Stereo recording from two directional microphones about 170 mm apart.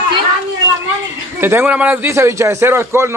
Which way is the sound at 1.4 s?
10° right (ahead or behind).